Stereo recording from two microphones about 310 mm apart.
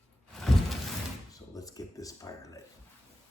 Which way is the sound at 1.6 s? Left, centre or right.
Centre.